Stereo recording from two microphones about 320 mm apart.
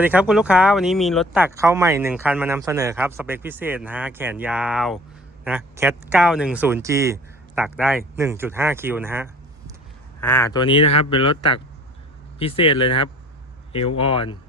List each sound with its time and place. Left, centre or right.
0.0 s speech: centre
10.2 s speech: centre